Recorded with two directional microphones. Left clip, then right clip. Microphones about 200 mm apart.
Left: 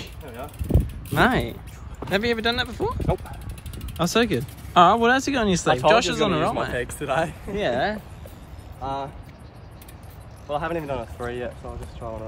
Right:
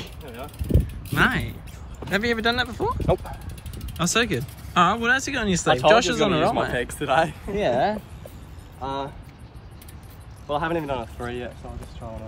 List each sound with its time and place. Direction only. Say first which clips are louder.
0.0 s mechanisms: left 1 dB; 10° left (ahead or behind)
1.1 s speech: left 1 dB; 20° left (ahead or behind)
2.0 s speech: even; 5° left (ahead or behind)
3.7 s speech: left 1 dB; 10° left (ahead or behind)
10.5 s speech: right 2 dB; centre (ahead or behind)